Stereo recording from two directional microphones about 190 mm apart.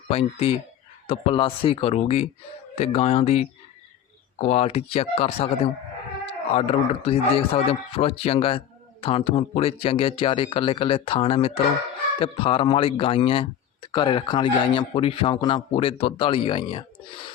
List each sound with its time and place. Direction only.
0.1 s speech: 30° left (ahead or behind)